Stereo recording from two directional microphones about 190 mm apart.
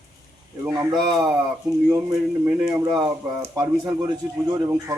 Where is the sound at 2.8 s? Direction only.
20° right (ahead or behind).